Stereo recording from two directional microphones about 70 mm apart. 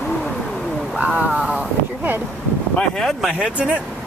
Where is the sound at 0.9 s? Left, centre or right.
Centre.